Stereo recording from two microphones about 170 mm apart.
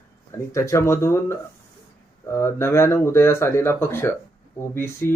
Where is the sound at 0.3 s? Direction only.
15° left (ahead or behind).